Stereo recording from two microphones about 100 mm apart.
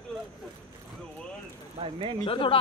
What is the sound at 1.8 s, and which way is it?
Speech, 55° right (ahead or behind).